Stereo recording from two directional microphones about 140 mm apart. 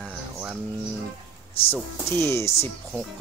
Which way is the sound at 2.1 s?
20° left (ahead or behind).